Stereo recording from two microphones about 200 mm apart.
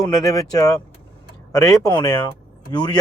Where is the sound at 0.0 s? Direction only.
15° left (ahead or behind).